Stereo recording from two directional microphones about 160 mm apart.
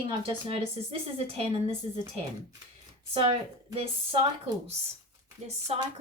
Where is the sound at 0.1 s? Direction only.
35° right (ahead or behind).